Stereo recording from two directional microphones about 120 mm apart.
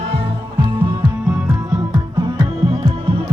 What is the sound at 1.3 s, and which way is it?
Music, 25° right (ahead or behind).